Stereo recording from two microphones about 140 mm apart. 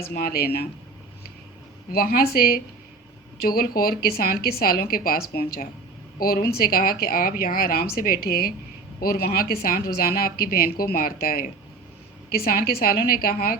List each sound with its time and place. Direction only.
0.0 s speech: 90° left
1.9 s speech: 90° left